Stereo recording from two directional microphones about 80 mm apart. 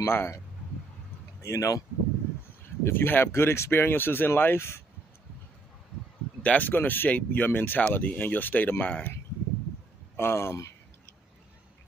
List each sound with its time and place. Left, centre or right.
0.0 s speech: left
1.4 s speech: left
2.8 s speech: left
6.4 s speech: left